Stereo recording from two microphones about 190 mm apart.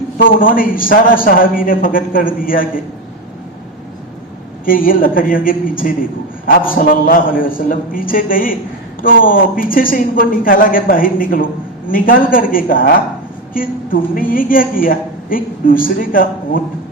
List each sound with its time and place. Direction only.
0.3 s a woman's voice: 45° left (ahead or behind)
4.6 s a woman's voice: 45° left (ahead or behind)